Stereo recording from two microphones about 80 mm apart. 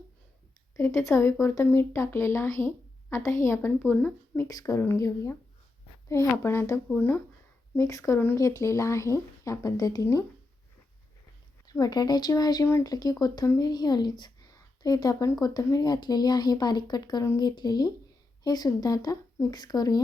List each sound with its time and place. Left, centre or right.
0.8 s speech: left
7.8 s speech: left
11.6 s a woman's voice: left